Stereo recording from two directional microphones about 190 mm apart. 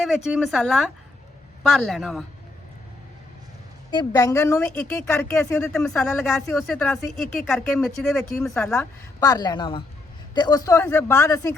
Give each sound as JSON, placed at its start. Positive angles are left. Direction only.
{"t": 0.3, "sound": "speech", "side_deg": -5}
{"t": 3.9, "sound": "speech", "side_deg": 20}
{"t": 5.1, "sound": "speech", "side_deg": 5}
{"t": 9.2, "sound": "speech", "side_deg": 20}